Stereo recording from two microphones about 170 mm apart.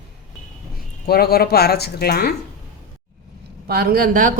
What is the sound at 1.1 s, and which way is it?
Speech, 65° left (ahead or behind).